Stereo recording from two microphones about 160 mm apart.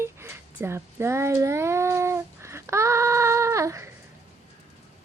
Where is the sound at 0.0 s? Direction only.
15° right (ahead or behind).